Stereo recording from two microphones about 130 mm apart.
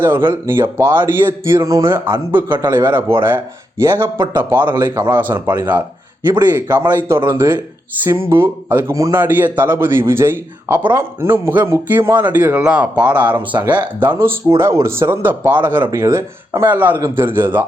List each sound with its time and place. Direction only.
0.0 s a man's voice: 15° right (ahead or behind)
4.7 s a man's voice: 25° right (ahead or behind)